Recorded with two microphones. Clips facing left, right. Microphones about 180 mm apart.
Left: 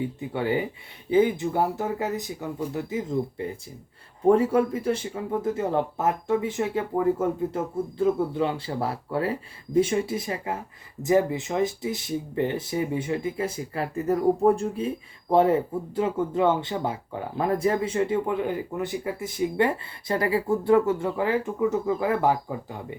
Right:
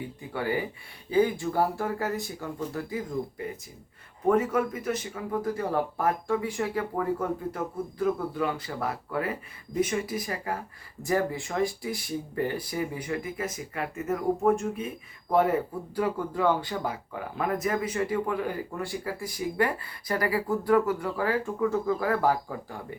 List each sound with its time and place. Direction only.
0.3 s speech: 25° left (ahead or behind)